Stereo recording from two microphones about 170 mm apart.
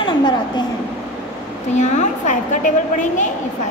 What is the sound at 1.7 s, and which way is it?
A woman's voice, 45° left (ahead or behind).